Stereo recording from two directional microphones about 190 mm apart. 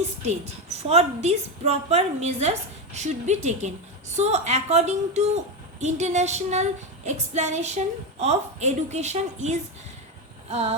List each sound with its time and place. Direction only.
0.3 s speech: 35° right (ahead or behind)